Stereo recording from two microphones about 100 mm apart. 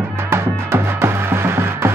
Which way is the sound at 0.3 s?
25° right (ahead or behind).